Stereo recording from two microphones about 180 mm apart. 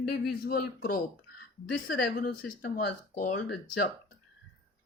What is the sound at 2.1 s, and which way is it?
Speech, 55° left (ahead or behind).